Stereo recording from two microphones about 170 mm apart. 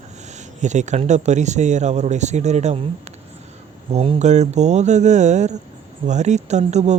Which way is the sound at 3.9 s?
35° right (ahead or behind).